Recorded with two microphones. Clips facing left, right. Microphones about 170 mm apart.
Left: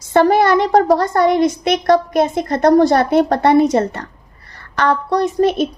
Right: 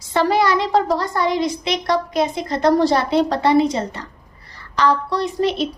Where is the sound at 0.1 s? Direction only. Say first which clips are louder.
Left 5 dB; 50° left (ahead or behind).